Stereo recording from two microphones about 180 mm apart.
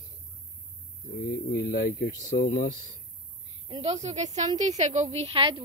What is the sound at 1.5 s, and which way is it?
Speech, 65° left (ahead or behind).